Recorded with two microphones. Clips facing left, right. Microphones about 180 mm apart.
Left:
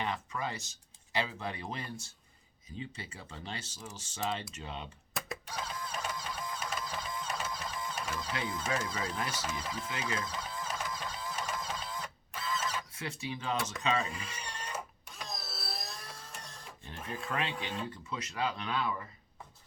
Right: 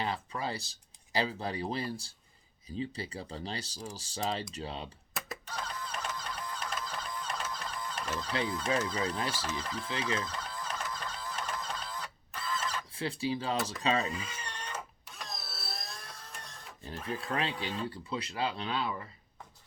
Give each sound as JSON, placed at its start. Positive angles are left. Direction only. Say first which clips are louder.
{"t": 0.0, "sound": "speech", "louder": "right 1 dB", "side_deg": -35}
{"t": 5.5, "sound": "printer", "louder": "even", "side_deg": 10}
{"t": 8.3, "sound": "speech", "louder": "right 5 dB", "side_deg": -30}
{"t": 9.4, "sound": "speech", "louder": "right 1 dB", "side_deg": 10}
{"t": 10.2, "sound": "goose", "louder": "right 1 dB", "side_deg": 10}
{"t": 12.9, "sound": "speech", "louder": "right 6 dB", "side_deg": -30}
{"t": 14.1, "sound": "a sound", "louder": "right 2 dB", "side_deg": 0}
{"t": 17.2, "sound": "speech", "louder": "even", "side_deg": -35}